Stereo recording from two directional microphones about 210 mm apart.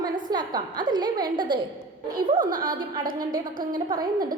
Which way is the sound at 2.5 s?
40° right (ahead or behind).